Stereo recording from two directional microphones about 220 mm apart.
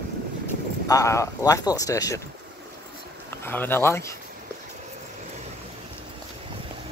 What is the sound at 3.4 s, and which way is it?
Speech, 10° left (ahead or behind).